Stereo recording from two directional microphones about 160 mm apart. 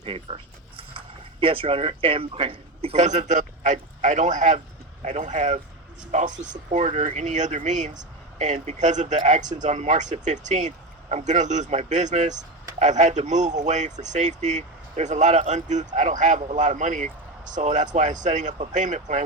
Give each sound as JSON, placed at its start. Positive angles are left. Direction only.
{"t": 0.0, "sound": "speech", "side_deg": -35}